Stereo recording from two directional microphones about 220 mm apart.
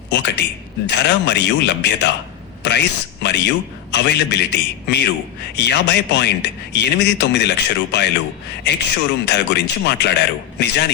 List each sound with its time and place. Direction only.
0.1 s a man's voice: 50° left (ahead or behind)